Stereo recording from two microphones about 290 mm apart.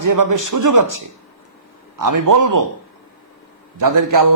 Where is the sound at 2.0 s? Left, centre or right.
Right.